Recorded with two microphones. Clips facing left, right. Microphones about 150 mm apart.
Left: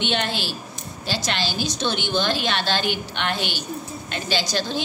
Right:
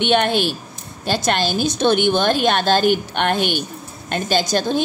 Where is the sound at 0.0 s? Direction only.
55° right (ahead or behind).